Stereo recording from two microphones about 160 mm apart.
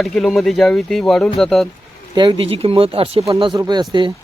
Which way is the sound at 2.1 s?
30° right (ahead or behind).